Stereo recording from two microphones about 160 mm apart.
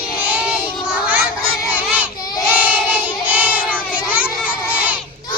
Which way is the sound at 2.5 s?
10° right (ahead or behind).